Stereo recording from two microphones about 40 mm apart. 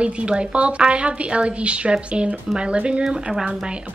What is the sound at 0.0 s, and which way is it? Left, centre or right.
A woman's voice, right.